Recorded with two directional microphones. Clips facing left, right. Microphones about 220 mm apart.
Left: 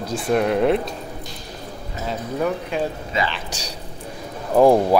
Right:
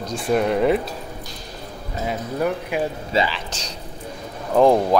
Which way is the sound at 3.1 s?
30° right (ahead or behind).